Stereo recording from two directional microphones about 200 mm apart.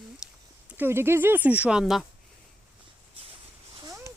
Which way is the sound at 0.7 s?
10° right (ahead or behind).